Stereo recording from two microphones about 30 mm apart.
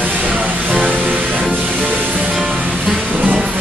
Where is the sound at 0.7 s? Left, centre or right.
Right.